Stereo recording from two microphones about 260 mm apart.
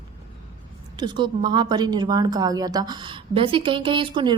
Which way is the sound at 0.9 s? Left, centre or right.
Centre.